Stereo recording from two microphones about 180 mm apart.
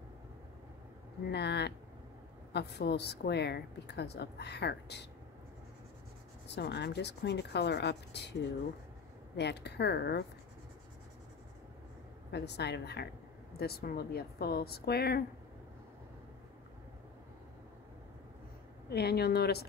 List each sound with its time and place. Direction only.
1.3 s a woman's voice: 70° left (ahead or behind)
6.4 s a woman's voice: 70° left (ahead or behind)
12.3 s a woman's voice: 70° left (ahead or behind)
18.9 s speech: 60° left (ahead or behind)